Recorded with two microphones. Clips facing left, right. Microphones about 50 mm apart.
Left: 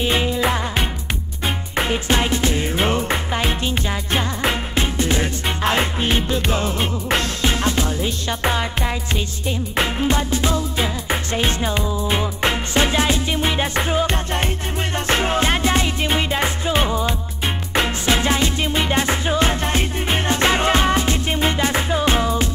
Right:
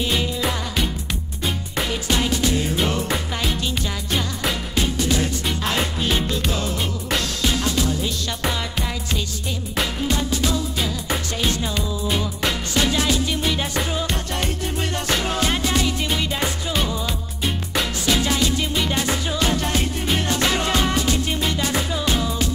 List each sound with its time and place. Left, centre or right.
0.0 s music: left